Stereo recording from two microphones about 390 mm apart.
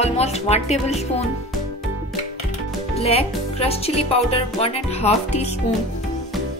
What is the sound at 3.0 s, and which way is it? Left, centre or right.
Speech, centre.